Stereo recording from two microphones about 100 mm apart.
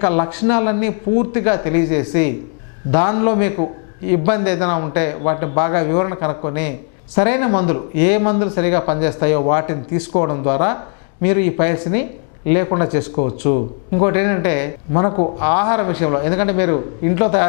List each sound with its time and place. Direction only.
0.0 s speech: 15° left (ahead or behind)